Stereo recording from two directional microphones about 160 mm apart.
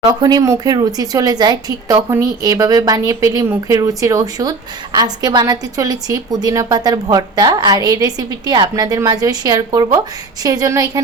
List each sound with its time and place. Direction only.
0.1 s speech: 25° right (ahead or behind)